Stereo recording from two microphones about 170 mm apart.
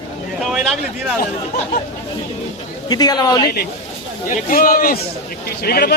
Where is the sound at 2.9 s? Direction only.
25° left (ahead or behind).